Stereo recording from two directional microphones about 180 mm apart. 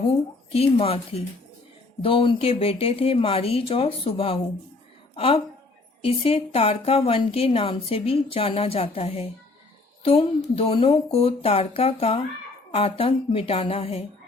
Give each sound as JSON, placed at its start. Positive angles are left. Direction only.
{"t": 0.5, "sound": "a woman's voice", "side_deg": 35}